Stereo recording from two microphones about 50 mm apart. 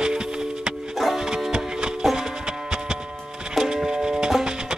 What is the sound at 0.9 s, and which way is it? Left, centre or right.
Music, centre.